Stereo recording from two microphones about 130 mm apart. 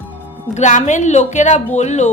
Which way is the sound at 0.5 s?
65° left (ahead or behind).